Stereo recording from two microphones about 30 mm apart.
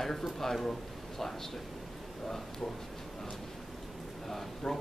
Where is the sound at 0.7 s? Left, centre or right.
Centre.